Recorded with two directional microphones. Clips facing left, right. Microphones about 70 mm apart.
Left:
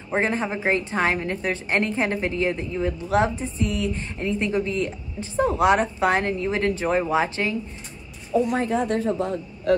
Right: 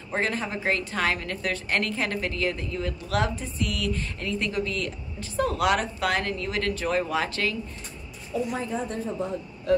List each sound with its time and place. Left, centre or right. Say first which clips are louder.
0.1 s a woman's voice: left 4 dB; left
8.3 s speech: left 7 dB; left